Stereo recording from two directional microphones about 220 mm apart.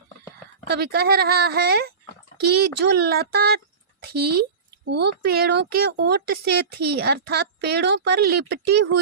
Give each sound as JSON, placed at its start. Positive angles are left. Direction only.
{"t": 0.7, "sound": "speech", "side_deg": -45}